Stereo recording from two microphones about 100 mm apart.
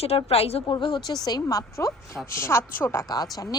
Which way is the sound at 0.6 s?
50° left (ahead or behind).